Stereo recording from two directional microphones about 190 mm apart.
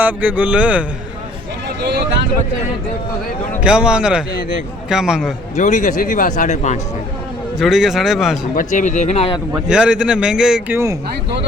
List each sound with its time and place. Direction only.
0.0 s speech: 10° right (ahead or behind)
1.8 s vehicle: 60° right (ahead or behind)
3.6 s a man's voice: 5° right (ahead or behind)
5.5 s speech: 40° left (ahead or behind)
7.6 s a man's voice: centre (ahead or behind)
8.5 s speech: 40° left (ahead or behind)
9.5 s a man's voice: 5° right (ahead or behind)